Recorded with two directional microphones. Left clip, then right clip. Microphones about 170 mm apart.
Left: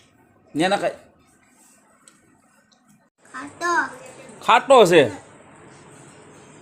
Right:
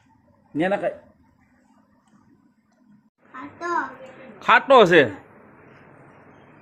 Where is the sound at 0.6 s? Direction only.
15° left (ahead or behind).